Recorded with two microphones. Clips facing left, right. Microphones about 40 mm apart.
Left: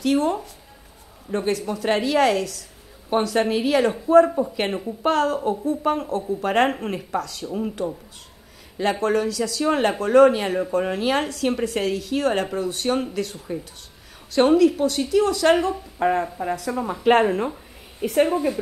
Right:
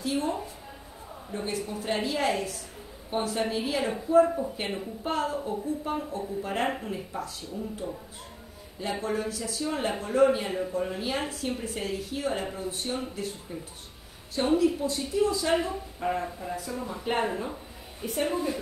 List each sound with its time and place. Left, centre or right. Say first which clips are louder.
0.0 s a woman's voice: left 8 dB; left
9.0 s a woman's voice: left 8 dB; left